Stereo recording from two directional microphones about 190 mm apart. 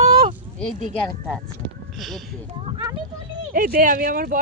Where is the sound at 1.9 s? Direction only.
Centre (ahead or behind).